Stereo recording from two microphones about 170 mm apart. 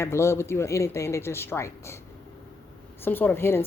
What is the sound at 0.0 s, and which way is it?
A woman's voice, 15° left (ahead or behind).